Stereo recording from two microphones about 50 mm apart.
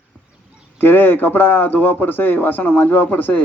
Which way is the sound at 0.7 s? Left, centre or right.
Left.